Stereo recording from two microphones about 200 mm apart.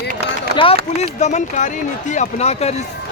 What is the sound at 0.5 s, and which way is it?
Run, 55° right (ahead or behind).